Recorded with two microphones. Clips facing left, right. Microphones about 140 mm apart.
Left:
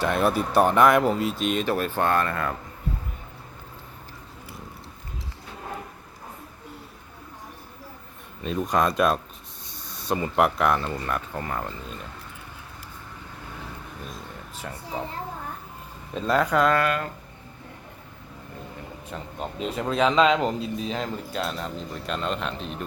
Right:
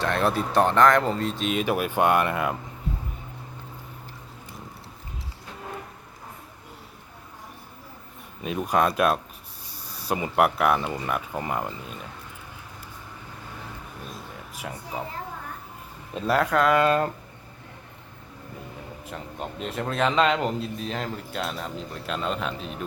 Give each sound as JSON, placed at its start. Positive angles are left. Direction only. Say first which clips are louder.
{"t": 0.0, "sound": "speech", "louder": "left 1 dB", "side_deg": 5}
{"t": 8.4, "sound": "speech", "louder": "even", "side_deg": -5}
{"t": 9.7, "sound": "snake", "louder": "even", "side_deg": -35}
{"t": 10.0, "sound": "speech", "louder": "even", "side_deg": -10}
{"t": 14.1, "sound": "a sound", "louder": "even", "side_deg": -10}
{"t": 16.1, "sound": "speech", "louder": "even", "side_deg": -5}
{"t": 19.1, "sound": "speech", "louder": "left 1 dB", "side_deg": 0}